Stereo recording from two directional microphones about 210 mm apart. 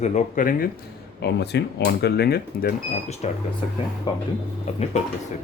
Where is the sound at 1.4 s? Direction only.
55° left (ahead or behind).